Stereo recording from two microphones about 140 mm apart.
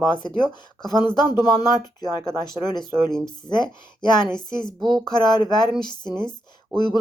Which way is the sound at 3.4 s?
30° left (ahead or behind).